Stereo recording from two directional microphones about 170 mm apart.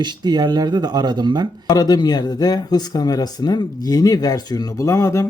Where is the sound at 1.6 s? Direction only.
25° left (ahead or behind).